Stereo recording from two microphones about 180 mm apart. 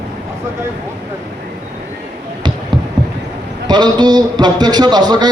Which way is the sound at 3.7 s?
25° right (ahead or behind).